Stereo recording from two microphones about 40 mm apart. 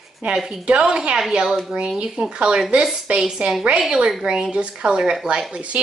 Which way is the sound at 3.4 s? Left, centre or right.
Right.